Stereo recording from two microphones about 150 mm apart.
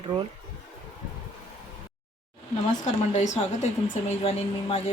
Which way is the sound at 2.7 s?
55° left (ahead or behind).